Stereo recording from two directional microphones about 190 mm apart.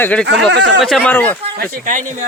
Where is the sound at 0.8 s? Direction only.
5° left (ahead or behind).